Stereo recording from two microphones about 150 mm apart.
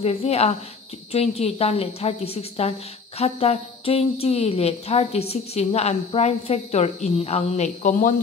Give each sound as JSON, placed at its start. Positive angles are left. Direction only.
{"t": 0.0, "sound": "a woman's voice", "side_deg": 40}